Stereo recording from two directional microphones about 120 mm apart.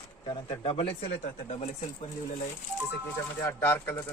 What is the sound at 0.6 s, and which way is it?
Speech, 50° left (ahead or behind).